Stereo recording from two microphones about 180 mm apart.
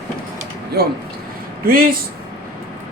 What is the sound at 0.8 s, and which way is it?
Speech, 60° right (ahead or behind).